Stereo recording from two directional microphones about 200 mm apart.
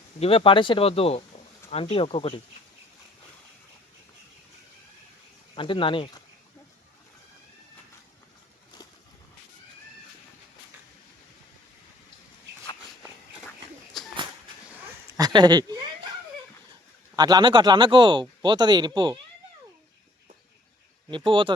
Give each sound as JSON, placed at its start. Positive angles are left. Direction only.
{"t": 0.2, "sound": "speech", "side_deg": 30}
{"t": 5.5, "sound": "speech", "side_deg": 25}
{"t": 14.0, "sound": "a sound", "side_deg": 0}
{"t": 15.2, "sound": "speech", "side_deg": -20}
{"t": 17.2, "sound": "speech", "side_deg": -20}
{"t": 21.1, "sound": "speech", "side_deg": -25}